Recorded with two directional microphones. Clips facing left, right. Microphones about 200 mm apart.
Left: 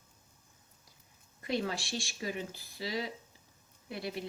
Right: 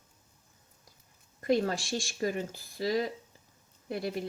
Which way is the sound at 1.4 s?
45° right (ahead or behind).